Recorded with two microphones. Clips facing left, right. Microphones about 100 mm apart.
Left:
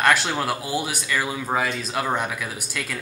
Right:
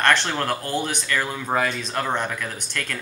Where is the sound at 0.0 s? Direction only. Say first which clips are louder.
Even; 5° left (ahead or behind).